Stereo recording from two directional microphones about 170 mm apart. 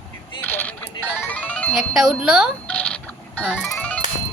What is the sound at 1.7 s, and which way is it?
Speech, 5° right (ahead or behind).